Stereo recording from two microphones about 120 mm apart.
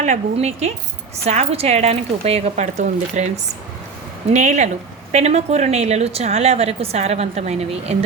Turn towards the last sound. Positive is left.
turn(degrees=-65)  # may be behind; listen again after turning